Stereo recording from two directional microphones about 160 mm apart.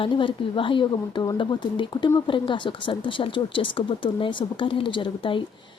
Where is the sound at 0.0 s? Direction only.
30° left (ahead or behind).